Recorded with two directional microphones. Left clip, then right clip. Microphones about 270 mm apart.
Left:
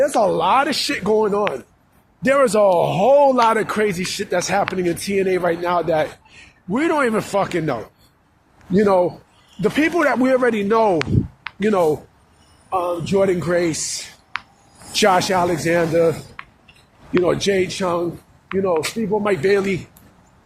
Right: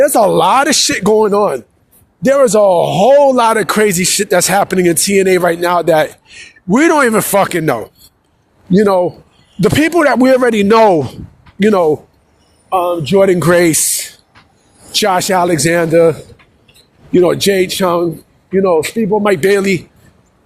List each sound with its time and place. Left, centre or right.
0.0 s speech: right
2.2 s speech: right
14.9 s speech: right